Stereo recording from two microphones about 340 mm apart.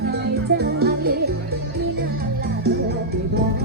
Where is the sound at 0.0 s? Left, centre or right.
Right.